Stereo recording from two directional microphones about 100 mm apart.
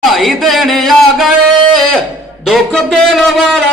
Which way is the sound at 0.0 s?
Centre (ahead or behind).